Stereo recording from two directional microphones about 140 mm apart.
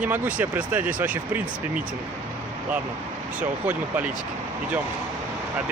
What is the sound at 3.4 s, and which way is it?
Speech, 10° right (ahead or behind).